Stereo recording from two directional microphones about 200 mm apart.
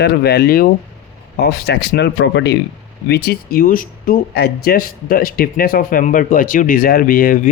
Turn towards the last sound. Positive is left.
turn(degrees=45)  # may be behind; listen again after turning